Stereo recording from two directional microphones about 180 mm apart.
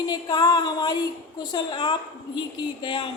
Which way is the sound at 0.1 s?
20° left (ahead or behind).